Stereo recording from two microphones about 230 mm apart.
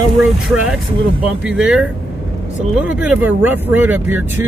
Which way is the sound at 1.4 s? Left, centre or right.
Centre.